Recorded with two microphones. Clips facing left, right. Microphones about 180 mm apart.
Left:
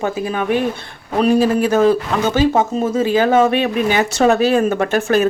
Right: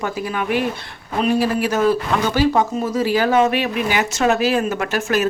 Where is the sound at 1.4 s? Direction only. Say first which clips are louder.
Left 4 dB; 30° left (ahead or behind).